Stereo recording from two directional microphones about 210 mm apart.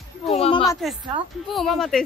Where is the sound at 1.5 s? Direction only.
Centre (ahead or behind).